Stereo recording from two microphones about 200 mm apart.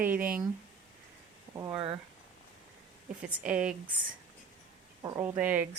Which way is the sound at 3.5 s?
5° right (ahead or behind).